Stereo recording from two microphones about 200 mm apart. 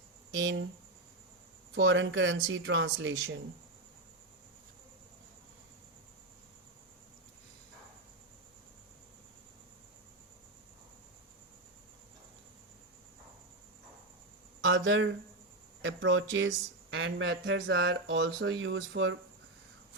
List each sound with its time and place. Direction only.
0.3 s speech: 65° right (ahead or behind)
1.7 s speech: 70° right (ahead or behind)
14.6 s speech: 70° right (ahead or behind)